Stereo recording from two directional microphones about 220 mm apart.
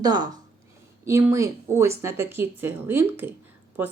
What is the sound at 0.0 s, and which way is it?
Speech, 20° right (ahead or behind).